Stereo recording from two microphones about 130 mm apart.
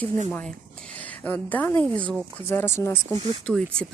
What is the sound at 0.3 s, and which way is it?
A woman's voice, 10° left (ahead or behind).